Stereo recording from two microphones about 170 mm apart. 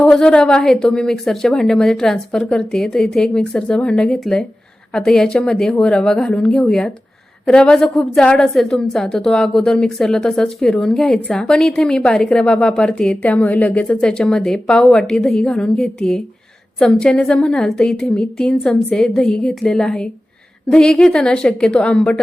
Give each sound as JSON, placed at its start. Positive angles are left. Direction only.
{"t": 0.0, "sound": "a woman's voice", "side_deg": 5}